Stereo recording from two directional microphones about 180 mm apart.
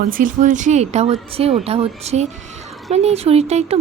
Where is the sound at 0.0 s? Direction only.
50° right (ahead or behind).